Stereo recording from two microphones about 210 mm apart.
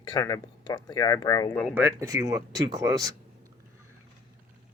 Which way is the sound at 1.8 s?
15° right (ahead or behind).